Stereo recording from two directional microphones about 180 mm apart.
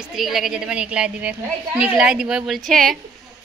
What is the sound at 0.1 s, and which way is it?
Speech, centre (ahead or behind).